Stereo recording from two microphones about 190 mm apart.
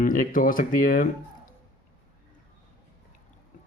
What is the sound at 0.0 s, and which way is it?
Speech, 45° left (ahead or behind).